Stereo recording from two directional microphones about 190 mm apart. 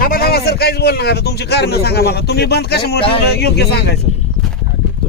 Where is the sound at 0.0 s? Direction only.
50° left (ahead or behind).